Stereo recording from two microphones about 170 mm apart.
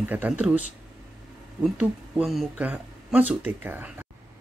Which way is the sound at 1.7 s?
5° right (ahead or behind).